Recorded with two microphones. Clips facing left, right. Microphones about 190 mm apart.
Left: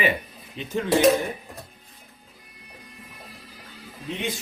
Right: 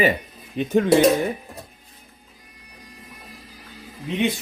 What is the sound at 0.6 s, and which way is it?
Speech, 50° right (ahead or behind).